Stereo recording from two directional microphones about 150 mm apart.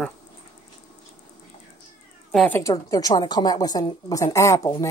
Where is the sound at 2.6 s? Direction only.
20° left (ahead or behind).